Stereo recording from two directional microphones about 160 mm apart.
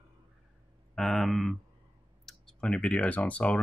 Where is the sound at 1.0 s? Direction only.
Centre (ahead or behind).